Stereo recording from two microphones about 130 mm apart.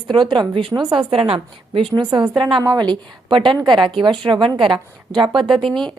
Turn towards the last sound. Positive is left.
turn(degrees=5)  # may be behind; listen again after turning